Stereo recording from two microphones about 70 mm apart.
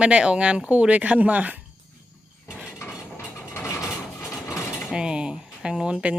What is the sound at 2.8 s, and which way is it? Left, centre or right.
Mechanisms, left.